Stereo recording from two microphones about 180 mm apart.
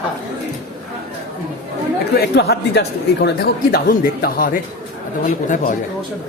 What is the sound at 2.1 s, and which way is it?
Speech, 65° left (ahead or behind).